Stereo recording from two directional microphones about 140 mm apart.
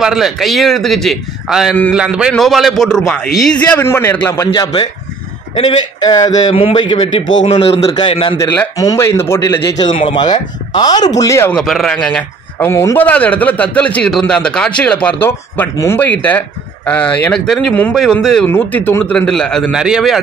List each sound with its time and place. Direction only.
0.0 s a man's voice: centre (ahead or behind)
3.7 s a man's voice: 15° left (ahead or behind)
5.9 s speech: 25° left (ahead or behind)
6.5 s a man's voice: 40° left (ahead or behind)
8.4 s a man's voice: 15° left (ahead or behind)
9.8 s speech: 35° left (ahead or behind); by 11.5 s 20° left (ahead or behind)
11.5 s a man's voice: centre (ahead or behind)
19.7 s a man's voice: 5° right (ahead or behind)